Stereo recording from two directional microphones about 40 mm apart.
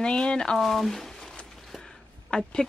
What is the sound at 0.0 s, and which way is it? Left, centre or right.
Speech, left.